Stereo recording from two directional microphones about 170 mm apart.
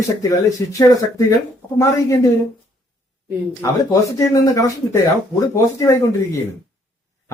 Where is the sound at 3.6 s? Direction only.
20° left (ahead or behind).